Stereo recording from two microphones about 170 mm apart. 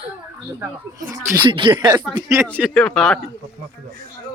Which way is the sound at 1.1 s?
25° right (ahead or behind).